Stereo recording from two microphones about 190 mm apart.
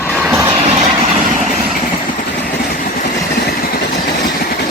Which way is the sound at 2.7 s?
50° left (ahead or behind).